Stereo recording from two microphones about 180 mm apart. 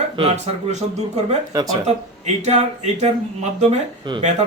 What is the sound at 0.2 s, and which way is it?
A man's voice, 35° right (ahead or behind).